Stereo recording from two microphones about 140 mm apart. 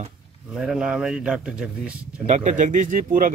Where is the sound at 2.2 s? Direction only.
55° right (ahead or behind); by 3.3 s 75° right (ahead or behind).